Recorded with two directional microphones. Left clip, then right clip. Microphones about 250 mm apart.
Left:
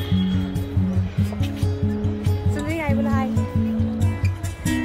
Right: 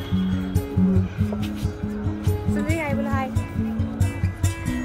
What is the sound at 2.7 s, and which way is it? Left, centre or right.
Music, centre.